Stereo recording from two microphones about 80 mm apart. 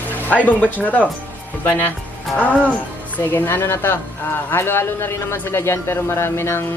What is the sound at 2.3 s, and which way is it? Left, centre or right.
A woman's voice, left.